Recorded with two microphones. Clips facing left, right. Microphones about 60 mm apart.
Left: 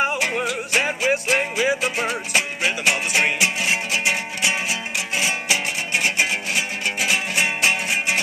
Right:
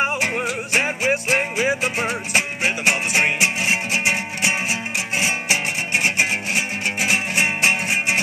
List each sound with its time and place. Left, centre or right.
0.0 s music: right